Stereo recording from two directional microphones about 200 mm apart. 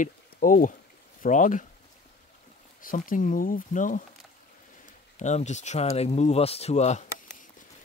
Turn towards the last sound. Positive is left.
turn(degrees=35)  # may be behind; listen again after turning